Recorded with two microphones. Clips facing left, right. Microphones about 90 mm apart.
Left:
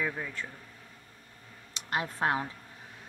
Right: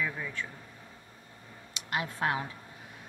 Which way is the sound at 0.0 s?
40° left (ahead or behind).